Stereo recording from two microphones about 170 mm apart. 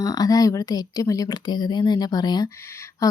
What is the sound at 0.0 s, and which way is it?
Speech, 20° left (ahead or behind).